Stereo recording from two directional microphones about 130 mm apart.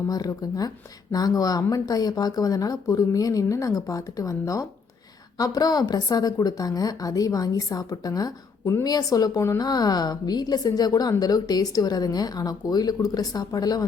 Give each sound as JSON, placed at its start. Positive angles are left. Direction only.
{"t": 0.1, "sound": "a woman's voice", "side_deg": 30}